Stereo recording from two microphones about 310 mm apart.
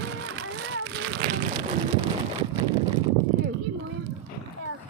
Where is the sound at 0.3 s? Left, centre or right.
Right.